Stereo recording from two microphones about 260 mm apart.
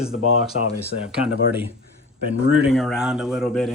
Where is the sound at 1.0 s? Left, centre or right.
Centre.